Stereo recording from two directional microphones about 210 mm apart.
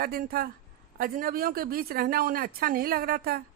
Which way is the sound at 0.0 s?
45° right (ahead or behind).